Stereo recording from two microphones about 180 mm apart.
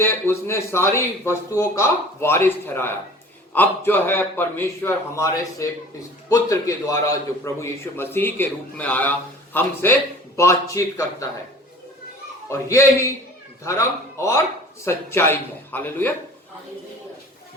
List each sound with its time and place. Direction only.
0.0 s a man's voice: 15° left (ahead or behind)
12.5 s a man's voice: 15° left (ahead or behind)